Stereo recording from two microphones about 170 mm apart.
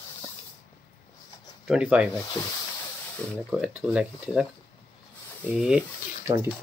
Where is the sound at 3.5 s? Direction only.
5° right (ahead or behind).